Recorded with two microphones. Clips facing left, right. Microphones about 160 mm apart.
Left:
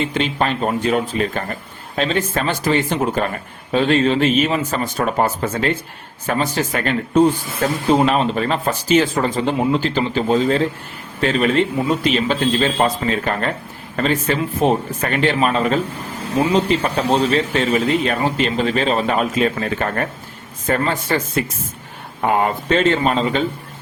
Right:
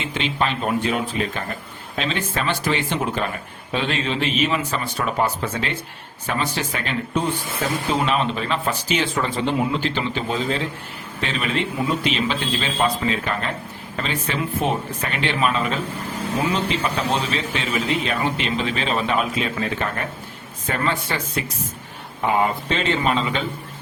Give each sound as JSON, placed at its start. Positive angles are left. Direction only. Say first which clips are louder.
{"t": 0.0, "sound": "speech", "louder": "left 4 dB", "side_deg": 40}